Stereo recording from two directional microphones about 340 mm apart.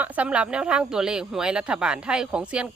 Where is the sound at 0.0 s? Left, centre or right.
Centre.